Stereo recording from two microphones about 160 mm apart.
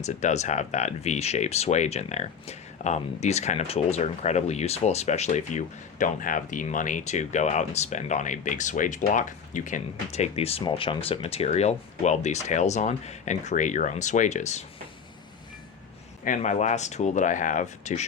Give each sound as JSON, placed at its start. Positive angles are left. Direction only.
{"t": 0.0, "sound": "speech", "side_deg": 45}
{"t": 16.2, "sound": "speech", "side_deg": 50}